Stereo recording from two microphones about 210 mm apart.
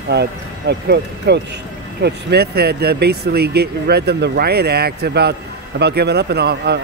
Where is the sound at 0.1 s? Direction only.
50° right (ahead or behind).